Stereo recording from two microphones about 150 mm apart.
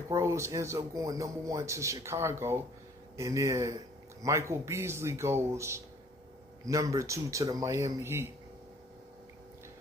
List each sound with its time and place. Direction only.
0.1 s a man's voice: 20° right (ahead or behind)